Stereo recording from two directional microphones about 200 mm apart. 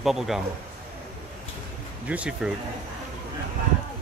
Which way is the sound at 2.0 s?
5° right (ahead or behind).